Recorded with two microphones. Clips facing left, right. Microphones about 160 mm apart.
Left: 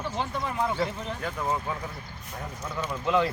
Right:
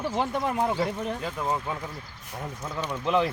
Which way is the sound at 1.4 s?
10° right (ahead or behind).